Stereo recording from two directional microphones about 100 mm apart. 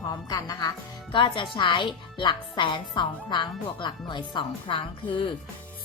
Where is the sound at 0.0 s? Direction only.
35° left (ahead or behind).